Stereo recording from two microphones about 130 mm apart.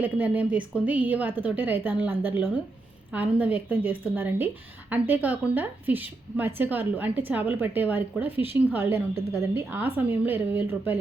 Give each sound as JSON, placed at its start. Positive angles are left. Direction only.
{"t": 0.0, "sound": "a woman's voice", "side_deg": -10}